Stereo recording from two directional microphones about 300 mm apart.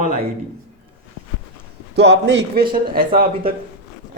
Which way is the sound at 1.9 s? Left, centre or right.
Right.